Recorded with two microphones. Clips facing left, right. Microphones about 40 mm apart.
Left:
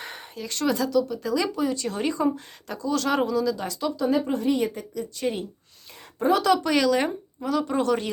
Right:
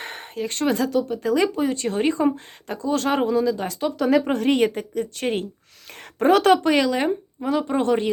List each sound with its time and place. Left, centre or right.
0.0 s speech: right
3.9 s speech: right
6.6 s speech: right
6.9 s speech: centre
7.4 s speech: right